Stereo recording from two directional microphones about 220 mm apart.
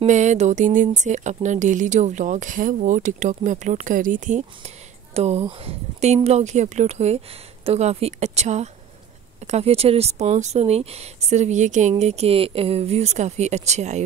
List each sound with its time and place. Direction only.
0.0 s speech: 35° right (ahead or behind)